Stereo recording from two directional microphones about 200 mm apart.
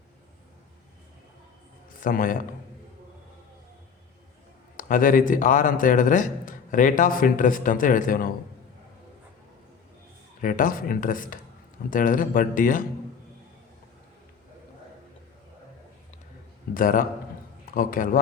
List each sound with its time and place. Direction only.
2.0 s a man's voice: 45° left (ahead or behind)
4.8 s a man's voice: 40° left (ahead or behind)
10.4 s a man's voice: 45° left (ahead or behind)
16.7 s speech: 45° left (ahead or behind)